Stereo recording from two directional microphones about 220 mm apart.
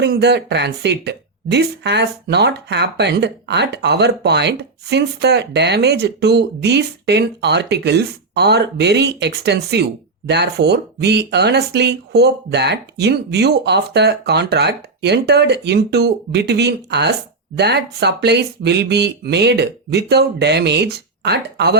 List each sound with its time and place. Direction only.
0.0 s a woman's voice: 50° right (ahead or behind)